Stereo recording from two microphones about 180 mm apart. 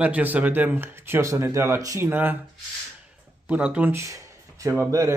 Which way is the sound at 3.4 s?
10° right (ahead or behind).